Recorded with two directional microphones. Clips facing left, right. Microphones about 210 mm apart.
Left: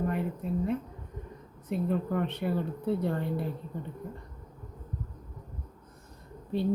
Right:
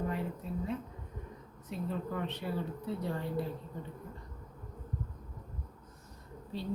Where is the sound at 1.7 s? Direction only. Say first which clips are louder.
Left 7 dB; 55° left (ahead or behind).